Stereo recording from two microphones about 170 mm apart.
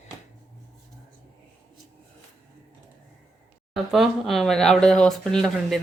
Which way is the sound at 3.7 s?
Centre (ahead or behind).